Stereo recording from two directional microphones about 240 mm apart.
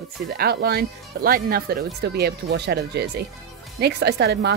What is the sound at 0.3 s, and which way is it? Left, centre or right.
Speech, right.